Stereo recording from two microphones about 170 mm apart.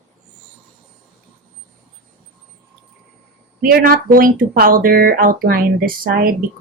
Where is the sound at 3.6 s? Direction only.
60° right (ahead or behind).